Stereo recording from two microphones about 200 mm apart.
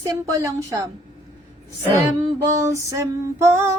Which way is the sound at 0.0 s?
15° right (ahead or behind).